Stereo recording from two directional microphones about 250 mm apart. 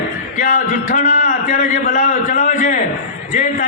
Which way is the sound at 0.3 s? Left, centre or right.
Left.